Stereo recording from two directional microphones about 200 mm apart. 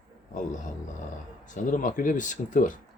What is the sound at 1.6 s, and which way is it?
Speech, 40° left (ahead or behind).